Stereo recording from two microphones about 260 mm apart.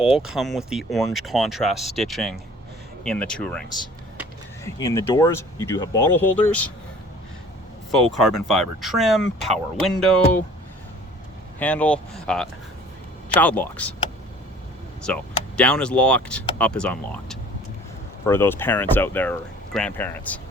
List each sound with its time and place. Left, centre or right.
0.2 s speech: centre
8.1 s speech: centre
11.6 s speech: centre
15.0 s speech: centre